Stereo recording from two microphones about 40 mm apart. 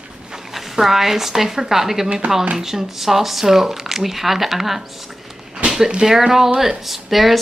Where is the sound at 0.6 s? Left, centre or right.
Centre.